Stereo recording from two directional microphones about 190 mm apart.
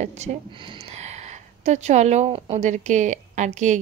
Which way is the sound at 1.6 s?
35° right (ahead or behind).